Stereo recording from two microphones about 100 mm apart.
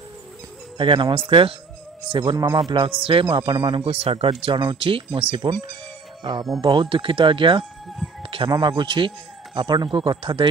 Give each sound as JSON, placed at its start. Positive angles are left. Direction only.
{"t": 0.7, "sound": "speech", "side_deg": -55}
{"t": 6.6, "sound": "speech", "side_deg": -55}
{"t": 8.2, "sound": "music", "side_deg": -65}
{"t": 8.5, "sound": "speech", "side_deg": -45}